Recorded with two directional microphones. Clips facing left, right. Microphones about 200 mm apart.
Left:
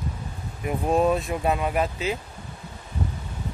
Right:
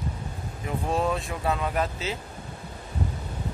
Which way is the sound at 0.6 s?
15° left (ahead or behind).